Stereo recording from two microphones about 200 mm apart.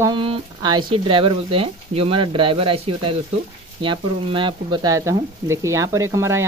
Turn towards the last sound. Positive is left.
turn(degrees=-15)  # may be behind; listen again after turning